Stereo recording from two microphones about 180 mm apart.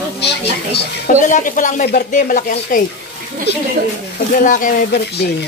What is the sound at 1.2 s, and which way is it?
Speech, 45° left (ahead or behind).